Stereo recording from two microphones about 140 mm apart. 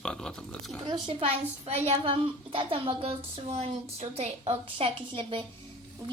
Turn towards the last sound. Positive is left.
turn(degrees=-40)  # may be behind; listen again after turning